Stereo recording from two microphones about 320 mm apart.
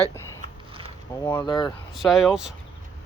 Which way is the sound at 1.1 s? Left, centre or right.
Centre.